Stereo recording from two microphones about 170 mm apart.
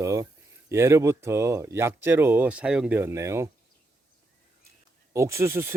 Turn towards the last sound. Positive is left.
turn(degrees=-15)  # may be behind; listen again after turning